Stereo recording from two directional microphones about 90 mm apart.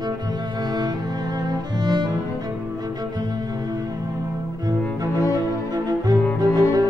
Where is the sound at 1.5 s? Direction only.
50° right (ahead or behind).